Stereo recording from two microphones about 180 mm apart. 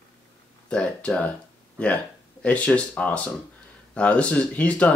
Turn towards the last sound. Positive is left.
turn(degrees=5)  # may be behind; listen again after turning